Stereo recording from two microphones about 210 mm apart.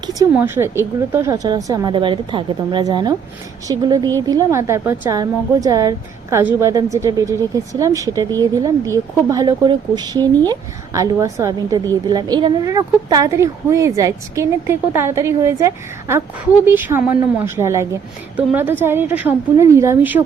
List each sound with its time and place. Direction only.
0.3 s a woman's voice: 10° right (ahead or behind)